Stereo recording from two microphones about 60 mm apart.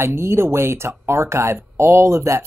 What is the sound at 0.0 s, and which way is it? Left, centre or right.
Speech, right.